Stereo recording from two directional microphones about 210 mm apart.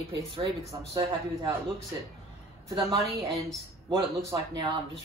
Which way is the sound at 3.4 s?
15° right (ahead or behind).